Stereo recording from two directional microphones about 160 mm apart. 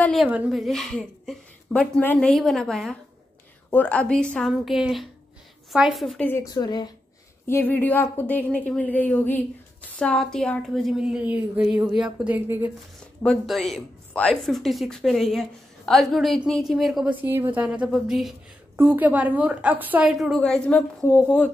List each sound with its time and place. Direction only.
0.0 s a sound: centre (ahead or behind)
0.3 s speech: 5° right (ahead or behind)
6.2 s a woman's voice: 20° left (ahead or behind)
7.4 s a woman's voice: 15° left (ahead or behind); by 12.7 s 15° right (ahead or behind)
13.2 s a woman's voice: 5° left (ahead or behind)